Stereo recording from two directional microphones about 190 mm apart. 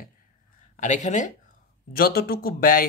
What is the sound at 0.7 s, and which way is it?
Speech, 40° left (ahead or behind).